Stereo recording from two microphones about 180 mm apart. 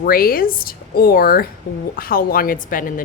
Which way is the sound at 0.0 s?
55° left (ahead or behind).